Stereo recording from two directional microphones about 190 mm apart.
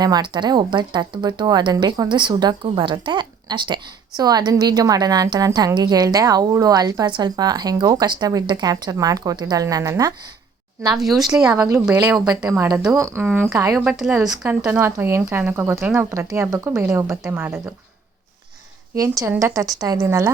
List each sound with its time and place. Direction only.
0.0 s a woman's voice: 20° right (ahead or behind)
10.8 s a woman's voice: centre (ahead or behind)
11.5 s speech: 15° right (ahead or behind)
11.9 s a woman's voice: 5° right (ahead or behind)
13.7 s a woman's voice: 5° right (ahead or behind)
18.9 s a woman's voice: 20° right (ahead or behind)